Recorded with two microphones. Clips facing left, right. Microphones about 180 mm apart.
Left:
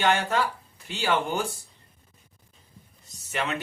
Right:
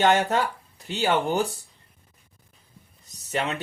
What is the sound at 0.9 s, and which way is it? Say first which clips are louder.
Speech: right 3 dB; 40° right (ahead or behind).